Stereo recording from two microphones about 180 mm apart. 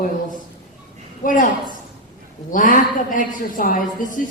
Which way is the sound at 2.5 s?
45° left (ahead or behind).